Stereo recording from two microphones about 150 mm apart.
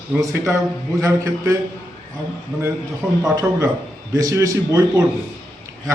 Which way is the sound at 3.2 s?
20° right (ahead or behind).